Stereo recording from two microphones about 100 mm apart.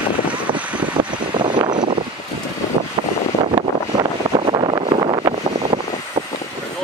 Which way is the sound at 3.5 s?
55° right (ahead or behind).